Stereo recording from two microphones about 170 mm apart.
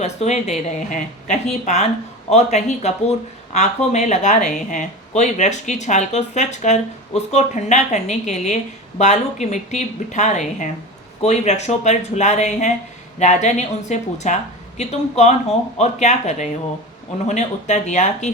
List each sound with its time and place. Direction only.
0.0 s speech: 40° left (ahead or behind)